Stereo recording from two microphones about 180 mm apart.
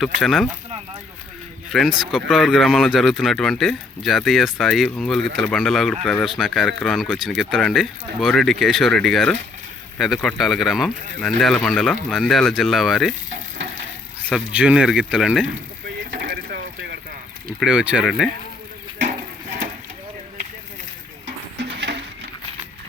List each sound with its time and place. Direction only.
0.0 s speech: centre (ahead or behind)
1.7 s speech: centre (ahead or behind)
14.3 s speech: 5° right (ahead or behind)
16.1 s mechanisms: 50° right (ahead or behind)
17.6 s speech: 5° right (ahead or behind)